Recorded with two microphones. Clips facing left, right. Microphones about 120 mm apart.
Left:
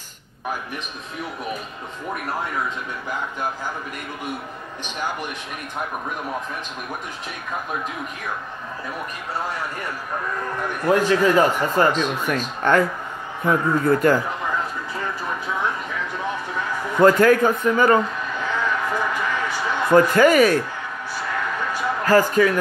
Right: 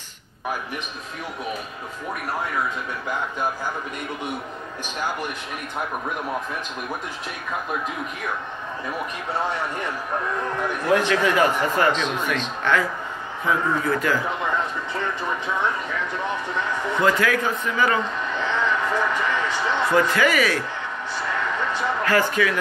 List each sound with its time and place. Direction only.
11.1 s speech: 35° left (ahead or behind)
11.9 s speech: 10° left (ahead or behind)
12.6 s a man's voice: 45° left (ahead or behind)
17.0 s a man's voice: 45° left (ahead or behind)
18.3 s a sound: 10° left (ahead or behind)
19.9 s a man's voice: 45° left (ahead or behind)
22.0 s speech: 40° left (ahead or behind)